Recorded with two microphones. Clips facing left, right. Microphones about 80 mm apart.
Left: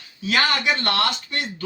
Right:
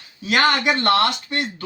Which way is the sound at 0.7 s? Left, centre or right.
Right.